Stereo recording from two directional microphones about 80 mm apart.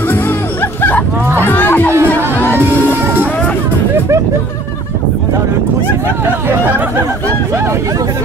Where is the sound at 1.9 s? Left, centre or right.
Right.